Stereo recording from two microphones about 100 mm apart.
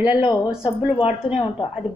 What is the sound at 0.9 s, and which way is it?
Speech, 90° left.